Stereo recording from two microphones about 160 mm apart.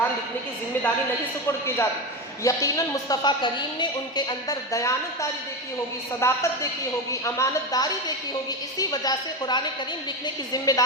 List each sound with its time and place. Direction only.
1.5 s a woman's voice: 15° left (ahead or behind)